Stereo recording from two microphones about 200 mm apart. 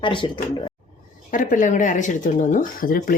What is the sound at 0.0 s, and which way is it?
Speech, 25° left (ahead or behind).